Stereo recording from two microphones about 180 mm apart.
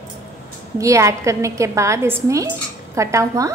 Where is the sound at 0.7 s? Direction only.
15° right (ahead or behind).